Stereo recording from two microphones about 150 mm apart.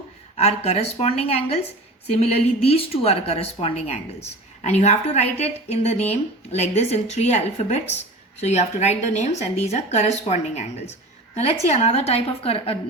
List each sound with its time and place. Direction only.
0.3 s a woman's voice: 45° left (ahead or behind)